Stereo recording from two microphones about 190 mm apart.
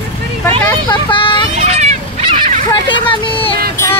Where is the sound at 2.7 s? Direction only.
25° left (ahead or behind).